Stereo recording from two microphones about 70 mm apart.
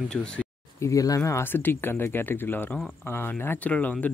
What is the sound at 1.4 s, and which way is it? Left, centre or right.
Speech, left.